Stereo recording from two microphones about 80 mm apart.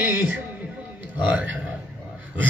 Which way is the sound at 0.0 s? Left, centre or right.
Right.